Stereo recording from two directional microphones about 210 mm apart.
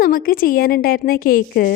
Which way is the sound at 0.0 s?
45° left (ahead or behind).